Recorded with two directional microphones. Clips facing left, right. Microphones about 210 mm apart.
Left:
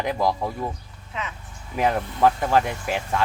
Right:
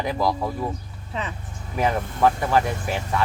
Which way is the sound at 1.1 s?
35° right (ahead or behind).